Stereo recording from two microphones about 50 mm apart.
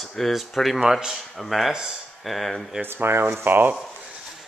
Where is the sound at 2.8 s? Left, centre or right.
Right.